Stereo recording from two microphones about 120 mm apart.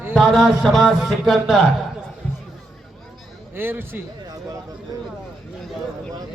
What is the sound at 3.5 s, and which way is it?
Speech, 20° right (ahead or behind).